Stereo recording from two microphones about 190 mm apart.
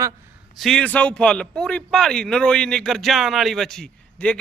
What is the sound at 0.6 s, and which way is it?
A man's voice, 5° left (ahead or behind).